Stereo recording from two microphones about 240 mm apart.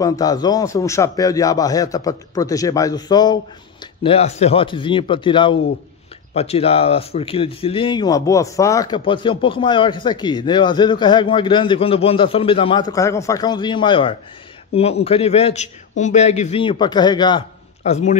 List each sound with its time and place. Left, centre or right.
0.0 s a man's voice: centre